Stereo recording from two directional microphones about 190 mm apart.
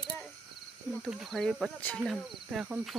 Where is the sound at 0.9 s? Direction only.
Centre (ahead or behind).